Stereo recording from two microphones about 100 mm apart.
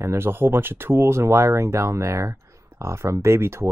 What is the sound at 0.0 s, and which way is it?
Speech, 25° right (ahead or behind).